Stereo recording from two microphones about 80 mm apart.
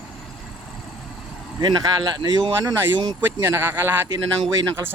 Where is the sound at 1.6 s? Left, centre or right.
Right.